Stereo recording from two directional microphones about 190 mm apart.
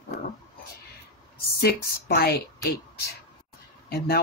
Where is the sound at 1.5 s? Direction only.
55° left (ahead or behind).